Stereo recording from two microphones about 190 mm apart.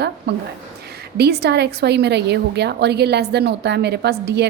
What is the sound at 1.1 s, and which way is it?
A woman's voice, 60° right (ahead or behind).